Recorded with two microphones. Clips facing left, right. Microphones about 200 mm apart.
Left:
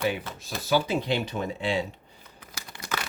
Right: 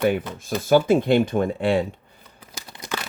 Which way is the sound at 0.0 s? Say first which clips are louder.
Right 7 dB; 50° right (ahead or behind).